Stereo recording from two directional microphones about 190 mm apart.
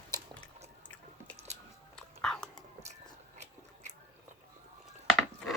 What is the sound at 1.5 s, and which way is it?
Biting, 35° right (ahead or behind).